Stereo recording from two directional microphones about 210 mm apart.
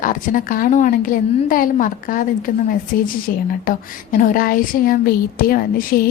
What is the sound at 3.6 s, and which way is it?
Speech, 40° left (ahead or behind).